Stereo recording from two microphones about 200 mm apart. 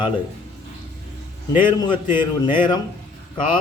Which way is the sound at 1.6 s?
25° left (ahead or behind).